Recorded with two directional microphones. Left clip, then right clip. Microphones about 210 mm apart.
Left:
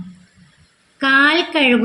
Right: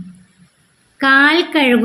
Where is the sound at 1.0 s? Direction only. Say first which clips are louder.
Right 2 dB; 20° right (ahead or behind).